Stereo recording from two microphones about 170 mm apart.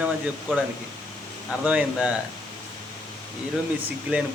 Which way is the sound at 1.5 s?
5° right (ahead or behind).